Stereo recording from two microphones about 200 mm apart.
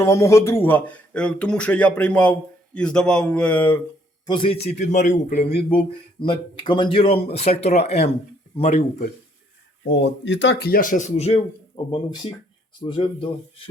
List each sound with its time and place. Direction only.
0.0 s speech: 15° left (ahead or behind)
4.3 s speech: 25° left (ahead or behind)
9.9 s speech: 60° left (ahead or behind); by 11.3 s 35° left (ahead or behind)
11.9 s speech: 25° left (ahead or behind)